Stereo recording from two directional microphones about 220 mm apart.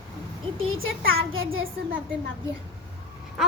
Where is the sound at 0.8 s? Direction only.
65° right (ahead or behind).